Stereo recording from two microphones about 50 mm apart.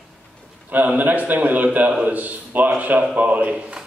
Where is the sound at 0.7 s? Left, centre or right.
Right.